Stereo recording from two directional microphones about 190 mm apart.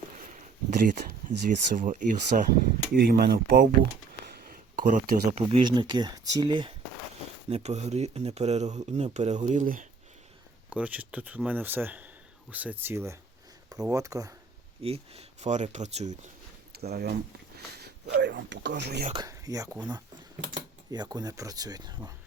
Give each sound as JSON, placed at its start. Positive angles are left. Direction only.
{"t": 0.7, "sound": "speech", "side_deg": -45}
{"t": 4.4, "sound": "a sound", "side_deg": -45}
{"t": 5.5, "sound": "speech", "side_deg": -25}
{"t": 7.5, "sound": "speech", "side_deg": -35}
{"t": 10.7, "sound": "speech", "side_deg": -5}
{"t": 14.8, "sound": "speech", "side_deg": -30}
{"t": 16.7, "sound": "speech", "side_deg": -55}
{"t": 19.1, "sound": "speech", "side_deg": -20}